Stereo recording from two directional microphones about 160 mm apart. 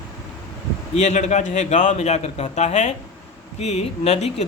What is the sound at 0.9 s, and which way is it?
A man's voice, 50° left (ahead or behind).